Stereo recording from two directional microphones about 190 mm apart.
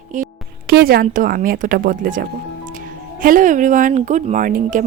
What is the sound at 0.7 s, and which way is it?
A woman's voice, 50° right (ahead or behind).